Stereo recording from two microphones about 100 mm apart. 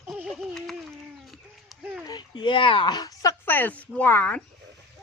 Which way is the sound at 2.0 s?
45° left (ahead or behind).